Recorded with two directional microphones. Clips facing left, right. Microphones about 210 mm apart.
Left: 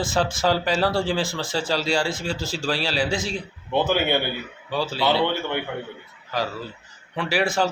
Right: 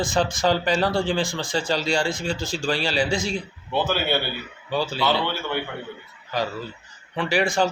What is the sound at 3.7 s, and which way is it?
Speech, 15° left (ahead or behind).